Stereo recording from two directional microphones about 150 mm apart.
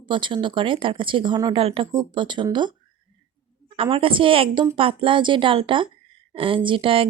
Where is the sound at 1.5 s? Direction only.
40° right (ahead or behind).